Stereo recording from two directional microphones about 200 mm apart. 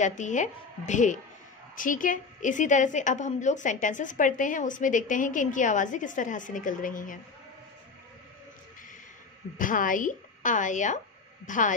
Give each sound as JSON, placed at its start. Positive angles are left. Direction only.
{"t": 0.0, "sound": "a woman's voice", "side_deg": 40}
{"t": 9.6, "sound": "a woman's voice", "side_deg": 40}